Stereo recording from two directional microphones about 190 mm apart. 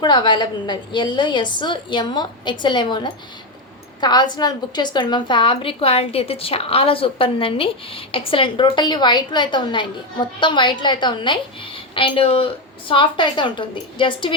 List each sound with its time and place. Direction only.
0.0 s a woman's voice: 25° left (ahead or behind)